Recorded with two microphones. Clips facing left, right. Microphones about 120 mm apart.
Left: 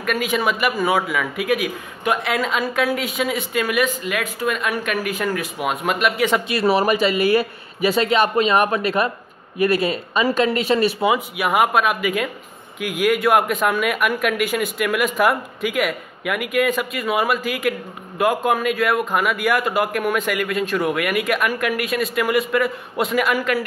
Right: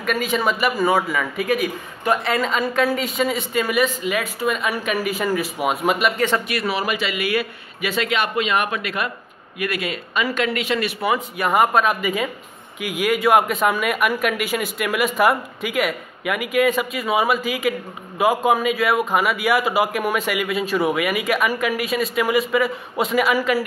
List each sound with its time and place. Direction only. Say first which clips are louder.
0.0 s speech: even; centre (ahead or behind)
6.4 s speech: left 5 dB; 25° left (ahead or behind)
6.7 s speech: left 8 dB; 40° left (ahead or behind)
11.0 s speech: left 2 dB; 20° left (ahead or behind)
11.3 s speech: even; 5° left (ahead or behind)